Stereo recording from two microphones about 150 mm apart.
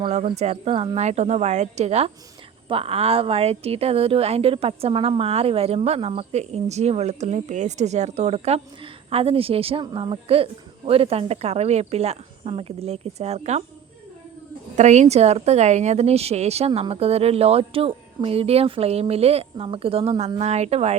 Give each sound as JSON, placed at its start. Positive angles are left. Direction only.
{"t": 0.0, "sound": "a woman's voice", "side_deg": -45}
{"t": 14.8, "sound": "a woman's voice", "side_deg": -50}